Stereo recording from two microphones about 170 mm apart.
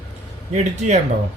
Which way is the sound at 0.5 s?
45° right (ahead or behind).